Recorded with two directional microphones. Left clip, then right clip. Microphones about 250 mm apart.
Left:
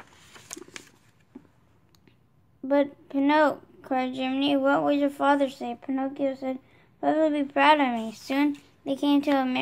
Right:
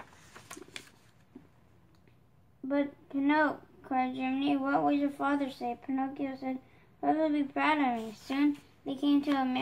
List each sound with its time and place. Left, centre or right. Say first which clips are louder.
2.7 s a woman's voice: left 8 dB; left